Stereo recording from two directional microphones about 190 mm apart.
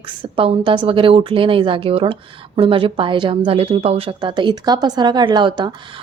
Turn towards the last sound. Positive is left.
turn(degrees=-25)  # may be behind; listen again after turning